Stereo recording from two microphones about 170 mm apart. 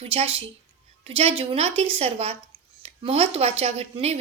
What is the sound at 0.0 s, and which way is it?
A woman's voice, 35° right (ahead or behind).